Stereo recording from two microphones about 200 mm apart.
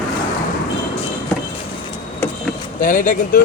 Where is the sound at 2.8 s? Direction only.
40° left (ahead or behind).